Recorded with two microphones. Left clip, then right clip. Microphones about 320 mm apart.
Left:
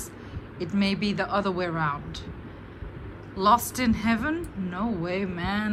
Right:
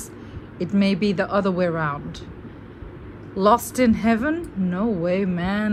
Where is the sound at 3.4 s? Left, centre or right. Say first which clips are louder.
Right 4 dB; centre.